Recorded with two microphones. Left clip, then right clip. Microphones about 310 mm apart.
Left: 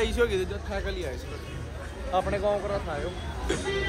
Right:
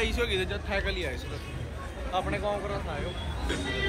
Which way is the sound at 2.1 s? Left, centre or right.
Left.